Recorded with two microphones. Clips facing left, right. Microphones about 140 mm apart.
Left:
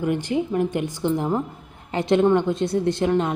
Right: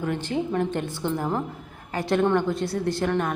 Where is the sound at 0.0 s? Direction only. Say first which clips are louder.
Left 4 dB; 15° left (ahead or behind).